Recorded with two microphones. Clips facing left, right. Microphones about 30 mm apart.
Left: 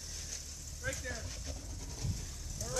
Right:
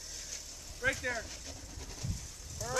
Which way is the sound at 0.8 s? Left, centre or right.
Right.